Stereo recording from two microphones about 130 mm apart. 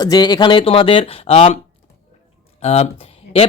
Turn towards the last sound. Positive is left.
turn(degrees=50)  # may be behind; listen again after turning